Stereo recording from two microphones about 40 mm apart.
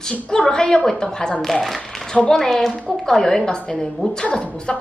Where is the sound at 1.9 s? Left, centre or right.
Centre.